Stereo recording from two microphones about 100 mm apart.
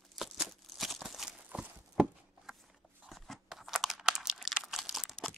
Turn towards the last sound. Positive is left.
turn(degrees=-5)  # may be behind; listen again after turning